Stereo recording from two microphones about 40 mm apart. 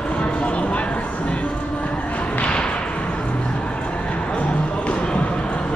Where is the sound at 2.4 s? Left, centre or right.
Left.